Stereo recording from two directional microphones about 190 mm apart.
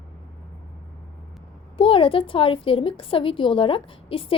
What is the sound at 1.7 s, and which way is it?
A woman's voice, 30° left (ahead or behind).